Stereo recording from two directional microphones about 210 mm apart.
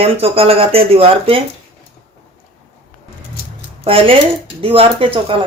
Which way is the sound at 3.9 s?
25° right (ahead or behind).